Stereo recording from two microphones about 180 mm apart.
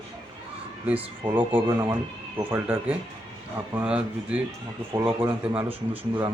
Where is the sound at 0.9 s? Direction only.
10° right (ahead or behind).